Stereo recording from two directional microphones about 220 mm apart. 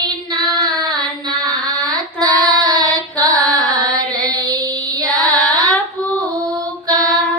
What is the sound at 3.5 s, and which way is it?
Carnatic music, 15° right (ahead or behind).